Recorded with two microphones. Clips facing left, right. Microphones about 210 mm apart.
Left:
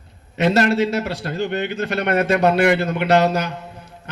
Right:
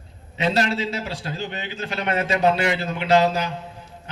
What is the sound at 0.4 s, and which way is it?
A man's voice, 60° left (ahead or behind).